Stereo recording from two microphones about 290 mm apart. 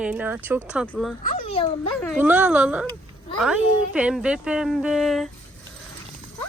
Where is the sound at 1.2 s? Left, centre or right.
Centre.